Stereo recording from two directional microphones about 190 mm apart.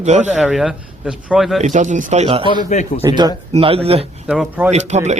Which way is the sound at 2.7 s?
35° left (ahead or behind).